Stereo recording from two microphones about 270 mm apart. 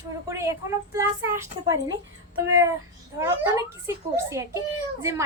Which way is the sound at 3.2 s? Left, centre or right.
Centre.